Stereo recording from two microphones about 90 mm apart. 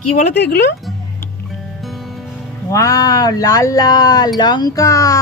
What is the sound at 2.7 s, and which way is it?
Speech, 40° left (ahead or behind).